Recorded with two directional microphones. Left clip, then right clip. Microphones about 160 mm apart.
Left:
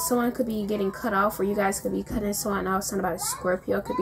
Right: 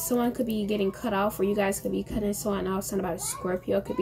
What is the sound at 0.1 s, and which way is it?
A child's voice, 5° right (ahead or behind).